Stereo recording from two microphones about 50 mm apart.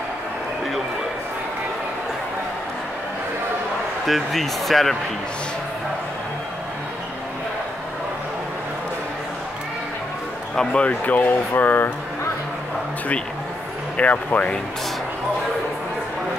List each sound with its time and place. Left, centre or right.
4.0 s speech: centre
10.5 s speech: centre
10.8 s speech: left
13.9 s speech: left